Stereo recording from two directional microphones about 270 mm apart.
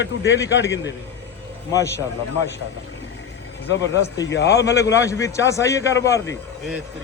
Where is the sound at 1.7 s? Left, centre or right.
Centre.